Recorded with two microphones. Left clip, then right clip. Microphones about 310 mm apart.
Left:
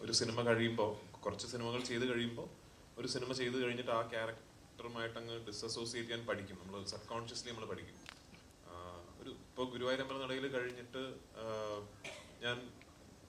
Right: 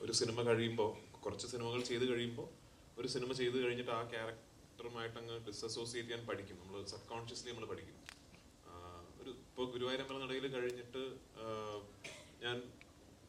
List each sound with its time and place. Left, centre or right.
0.0 s a man's voice: centre
9.2 s a man's voice: centre
12.0 s a sound: right
12.4 s a man's voice: centre